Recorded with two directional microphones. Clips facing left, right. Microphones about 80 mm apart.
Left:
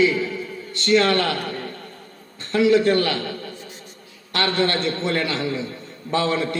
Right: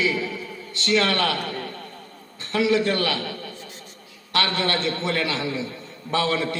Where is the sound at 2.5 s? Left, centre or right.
Left.